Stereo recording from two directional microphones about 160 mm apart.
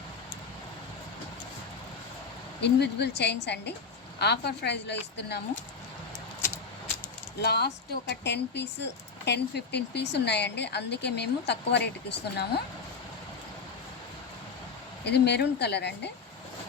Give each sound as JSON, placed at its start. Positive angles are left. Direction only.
{"t": 2.6, "sound": "speech", "side_deg": 90}
{"t": 7.4, "sound": "speech", "side_deg": 90}
{"t": 15.0, "sound": "speech", "side_deg": 90}